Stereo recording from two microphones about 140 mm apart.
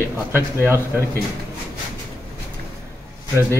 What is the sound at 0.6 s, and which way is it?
Speech, 20° right (ahead or behind).